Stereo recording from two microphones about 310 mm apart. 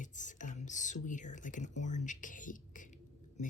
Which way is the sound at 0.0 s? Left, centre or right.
Left.